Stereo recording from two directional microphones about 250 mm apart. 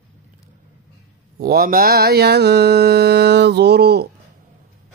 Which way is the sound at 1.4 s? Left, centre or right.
Right.